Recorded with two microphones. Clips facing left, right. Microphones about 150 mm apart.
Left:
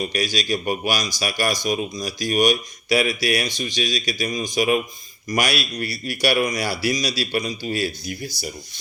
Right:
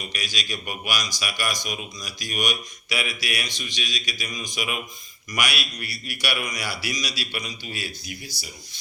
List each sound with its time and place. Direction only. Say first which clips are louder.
0.1 s speech: left 10 dB; 35° left (ahead or behind)